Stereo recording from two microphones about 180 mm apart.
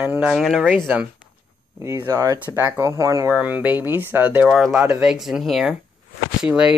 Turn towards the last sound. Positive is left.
turn(degrees=-5)  # may be behind; listen again after turning